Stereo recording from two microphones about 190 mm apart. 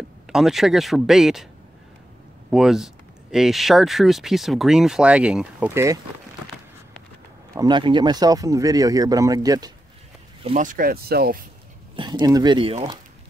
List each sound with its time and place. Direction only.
0.3 s speech: centre (ahead or behind)
2.5 s speech: centre (ahead or behind)
7.5 s speech: 25° right (ahead or behind)
10.4 s speech: 40° right (ahead or behind)
11.9 s speech: 25° right (ahead or behind)